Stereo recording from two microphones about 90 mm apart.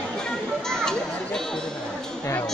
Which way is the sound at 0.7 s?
5° left (ahead or behind).